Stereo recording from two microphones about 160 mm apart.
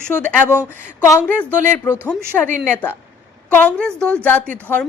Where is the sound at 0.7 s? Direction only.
15° left (ahead or behind).